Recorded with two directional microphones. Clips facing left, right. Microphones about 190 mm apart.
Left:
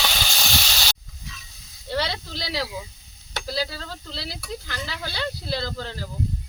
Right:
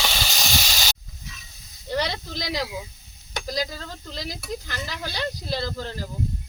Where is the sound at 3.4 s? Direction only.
15° right (ahead or behind).